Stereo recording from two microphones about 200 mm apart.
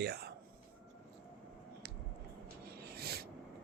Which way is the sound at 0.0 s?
55° right (ahead or behind).